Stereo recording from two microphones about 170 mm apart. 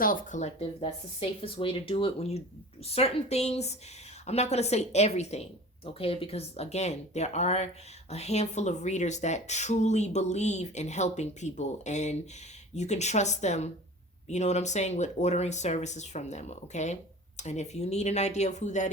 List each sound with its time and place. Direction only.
0.0 s speech: 55° left (ahead or behind)